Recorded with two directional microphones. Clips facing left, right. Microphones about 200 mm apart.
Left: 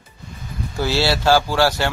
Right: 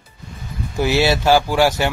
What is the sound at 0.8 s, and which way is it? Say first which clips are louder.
Speech: right 3 dB; 15° right (ahead or behind).